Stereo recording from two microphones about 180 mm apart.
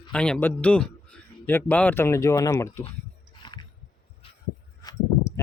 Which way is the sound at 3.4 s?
25° left (ahead or behind).